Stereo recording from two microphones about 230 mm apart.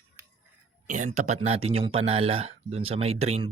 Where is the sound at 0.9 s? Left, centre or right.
Right.